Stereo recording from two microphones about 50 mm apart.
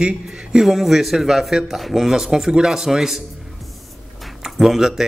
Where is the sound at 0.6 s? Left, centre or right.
Centre.